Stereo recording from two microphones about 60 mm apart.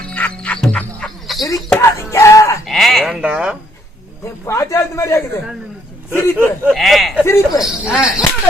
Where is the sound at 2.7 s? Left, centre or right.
Centre.